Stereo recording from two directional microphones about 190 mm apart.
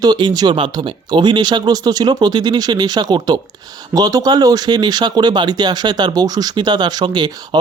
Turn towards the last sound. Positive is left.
turn(degrees=-25)  # may be behind; listen again after turning